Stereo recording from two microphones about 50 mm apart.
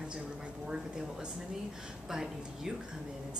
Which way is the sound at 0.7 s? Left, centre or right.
Centre.